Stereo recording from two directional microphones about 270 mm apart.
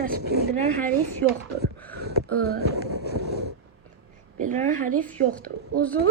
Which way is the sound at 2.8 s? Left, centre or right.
Left.